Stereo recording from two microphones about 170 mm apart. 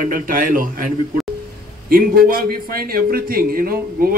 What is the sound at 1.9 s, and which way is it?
A man's voice, 60° right (ahead or behind).